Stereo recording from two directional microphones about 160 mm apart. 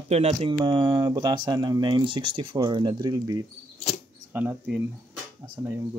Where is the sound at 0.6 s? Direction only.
25° right (ahead or behind).